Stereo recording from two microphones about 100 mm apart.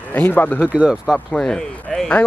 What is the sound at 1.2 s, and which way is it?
Speech, 5° left (ahead or behind).